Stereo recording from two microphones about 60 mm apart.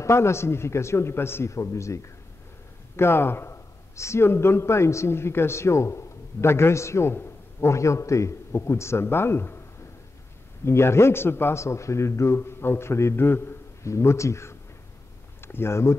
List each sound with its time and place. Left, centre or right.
0.0 s a man's voice: left
3.0 s a man's voice: left
10.6 s a man's voice: left
11.6 s a man's voice: left
13.8 s a man's voice: left